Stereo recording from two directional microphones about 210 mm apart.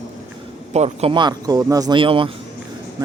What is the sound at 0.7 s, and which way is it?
Speech, 30° right (ahead or behind).